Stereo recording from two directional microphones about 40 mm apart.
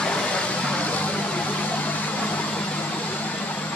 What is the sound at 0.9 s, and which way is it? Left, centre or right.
Vehicle, left.